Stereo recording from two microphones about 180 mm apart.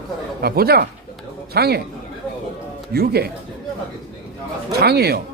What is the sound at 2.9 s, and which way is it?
Speech, 60° right (ahead or behind).